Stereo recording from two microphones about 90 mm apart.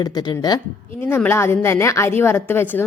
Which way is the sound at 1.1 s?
25° left (ahead or behind).